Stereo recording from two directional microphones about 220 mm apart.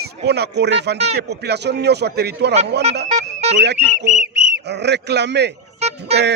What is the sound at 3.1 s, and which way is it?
Music, 30° right (ahead or behind).